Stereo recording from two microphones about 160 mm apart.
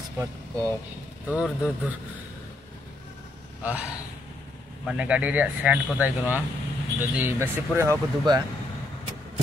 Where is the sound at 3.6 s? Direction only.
10° right (ahead or behind).